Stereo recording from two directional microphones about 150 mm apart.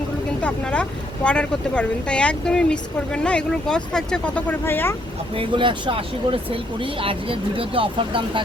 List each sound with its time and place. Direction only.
0.4 s speech: 5° left (ahead or behind)
5.3 s speech: 35° right (ahead or behind)